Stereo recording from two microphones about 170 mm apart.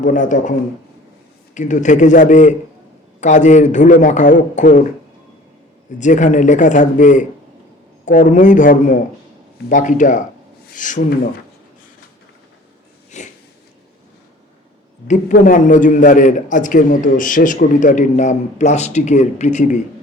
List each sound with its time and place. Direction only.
0.0 s a man's voice: 50° left (ahead or behind)
1.5 s a man's voice: 45° left (ahead or behind)
6.0 s a man's voice: 45° left (ahead or behind)
13.1 s sniff: 45° left (ahead or behind)
15.0 s a man's voice: 45° left (ahead or behind)